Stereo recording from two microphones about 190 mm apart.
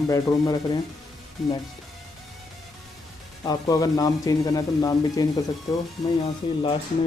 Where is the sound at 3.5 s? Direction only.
20° left (ahead or behind).